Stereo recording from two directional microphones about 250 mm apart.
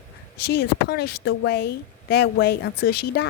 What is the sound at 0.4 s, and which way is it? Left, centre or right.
Speech, left.